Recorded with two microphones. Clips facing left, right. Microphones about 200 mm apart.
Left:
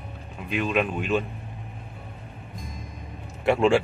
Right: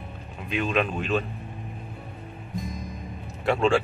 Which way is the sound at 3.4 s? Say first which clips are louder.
Left 2 dB; 20° left (ahead or behind).